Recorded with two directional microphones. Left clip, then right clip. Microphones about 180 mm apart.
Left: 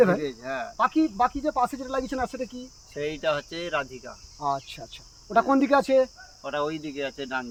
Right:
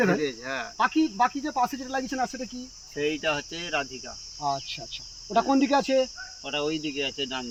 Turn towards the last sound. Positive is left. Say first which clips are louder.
# even
turn(degrees=-10)  # may be behind; listen again after turning